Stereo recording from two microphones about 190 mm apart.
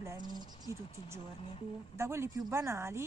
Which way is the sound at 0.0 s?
20° right (ahead or behind).